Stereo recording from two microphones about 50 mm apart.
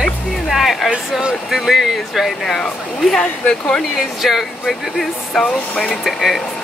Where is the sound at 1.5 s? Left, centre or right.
Centre.